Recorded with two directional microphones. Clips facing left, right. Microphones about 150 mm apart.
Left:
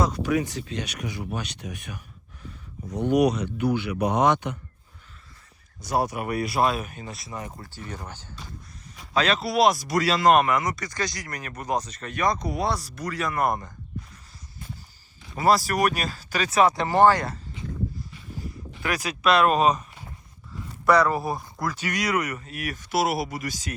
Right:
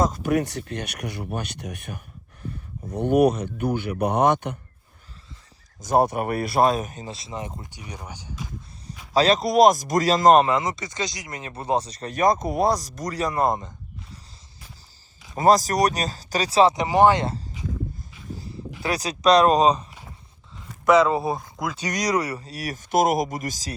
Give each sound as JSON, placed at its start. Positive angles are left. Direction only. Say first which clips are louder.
{"t": 0.0, "sound": "speech", "louder": "right 2 dB", "side_deg": -50}
{"t": 5.8, "sound": "speech", "louder": "right 5 dB", "side_deg": -50}
{"t": 6.9, "sound": "speech", "louder": "right 2 dB", "side_deg": -25}
{"t": 9.1, "sound": "speech", "louder": "right 5 dB", "side_deg": -35}
{"t": 13.4, "sound": "speech", "louder": "right 2 dB", "side_deg": -20}
{"t": 15.4, "sound": "speech", "louder": "right 3 dB", "side_deg": -40}
{"t": 16.8, "sound": "speech", "louder": "right 1 dB", "side_deg": -15}
{"t": 18.8, "sound": "speech", "louder": "right 2 dB", "side_deg": -35}
{"t": 20.8, "sound": "speech", "louder": "right 3 dB", "side_deg": -20}
{"t": 21.9, "sound": "speech", "louder": "right 4 dB", "side_deg": -35}